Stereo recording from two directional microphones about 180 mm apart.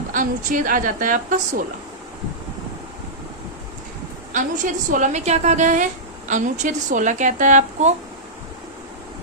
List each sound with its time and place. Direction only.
0.1 s a woman's voice: 50° right (ahead or behind)
4.3 s a woman's voice: 45° right (ahead or behind)